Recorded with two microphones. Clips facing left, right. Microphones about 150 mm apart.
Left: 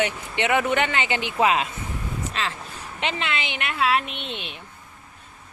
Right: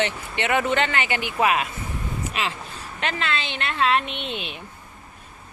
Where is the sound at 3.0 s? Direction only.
20° left (ahead or behind); by 4.5 s centre (ahead or behind).